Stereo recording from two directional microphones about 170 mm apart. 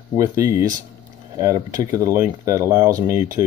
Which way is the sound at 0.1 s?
20° right (ahead or behind).